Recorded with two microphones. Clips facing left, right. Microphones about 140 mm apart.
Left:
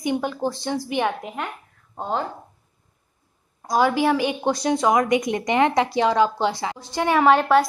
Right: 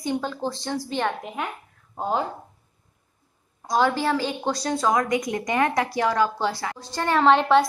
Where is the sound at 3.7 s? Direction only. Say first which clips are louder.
Left 3 dB; 10° left (ahead or behind).